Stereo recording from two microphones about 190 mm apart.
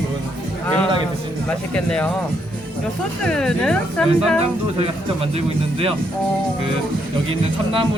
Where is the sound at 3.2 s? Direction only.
5° left (ahead or behind).